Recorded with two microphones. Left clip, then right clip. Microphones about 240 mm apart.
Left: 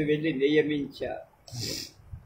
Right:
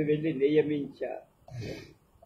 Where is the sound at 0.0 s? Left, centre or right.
Left.